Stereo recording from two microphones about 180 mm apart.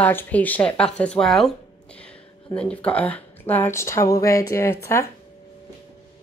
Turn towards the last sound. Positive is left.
turn(degrees=15)  # may be behind; listen again after turning